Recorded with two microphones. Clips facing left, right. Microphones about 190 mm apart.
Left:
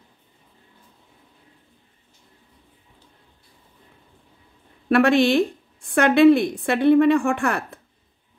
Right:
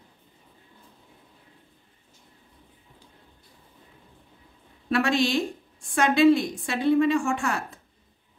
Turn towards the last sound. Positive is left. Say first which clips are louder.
# left 4 dB
turn(degrees=60)  # may be behind; listen again after turning